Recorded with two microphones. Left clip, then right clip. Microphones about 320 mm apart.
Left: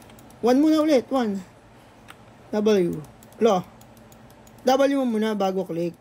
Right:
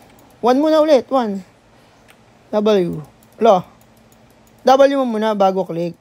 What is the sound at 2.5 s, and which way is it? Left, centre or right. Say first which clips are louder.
A man's voice: right 6 dB; right.